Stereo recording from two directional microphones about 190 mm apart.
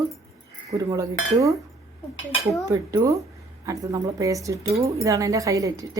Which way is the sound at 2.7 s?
15° right (ahead or behind).